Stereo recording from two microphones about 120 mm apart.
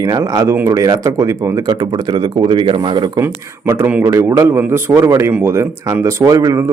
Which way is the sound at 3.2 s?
20° right (ahead or behind).